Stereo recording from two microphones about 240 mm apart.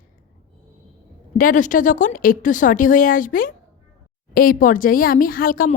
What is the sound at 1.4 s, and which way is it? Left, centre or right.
Speech, left.